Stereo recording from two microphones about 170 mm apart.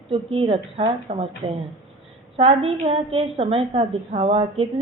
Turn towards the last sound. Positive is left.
turn(degrees=-35)  # may be behind; listen again after turning